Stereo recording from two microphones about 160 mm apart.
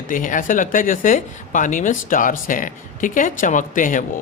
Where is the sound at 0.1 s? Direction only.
55° left (ahead or behind).